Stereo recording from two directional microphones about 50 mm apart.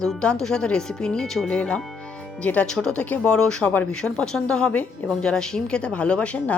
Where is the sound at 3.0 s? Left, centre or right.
Left.